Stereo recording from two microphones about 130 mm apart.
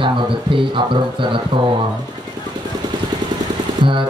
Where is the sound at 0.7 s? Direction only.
40° right (ahead or behind).